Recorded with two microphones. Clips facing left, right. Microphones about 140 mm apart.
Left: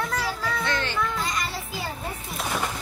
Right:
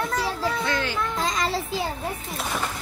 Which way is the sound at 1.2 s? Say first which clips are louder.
Right 4 dB; 90° right.